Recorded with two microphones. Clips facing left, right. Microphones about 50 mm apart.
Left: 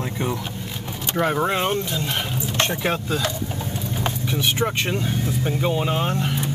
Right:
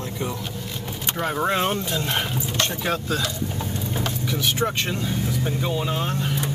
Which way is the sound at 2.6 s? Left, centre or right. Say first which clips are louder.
Left 3 dB; left.